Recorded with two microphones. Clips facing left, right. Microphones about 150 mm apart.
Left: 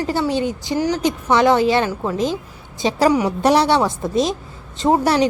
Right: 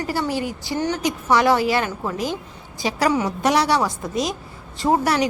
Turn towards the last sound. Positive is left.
turn(degrees=25)  # may be behind; listen again after turning